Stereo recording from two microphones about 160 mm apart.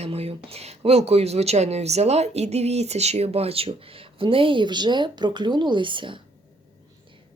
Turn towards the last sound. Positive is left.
turn(degrees=-30)  # may be behind; listen again after turning